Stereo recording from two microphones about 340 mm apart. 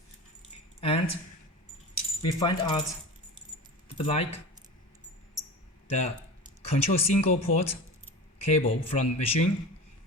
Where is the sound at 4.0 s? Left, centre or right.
Centre.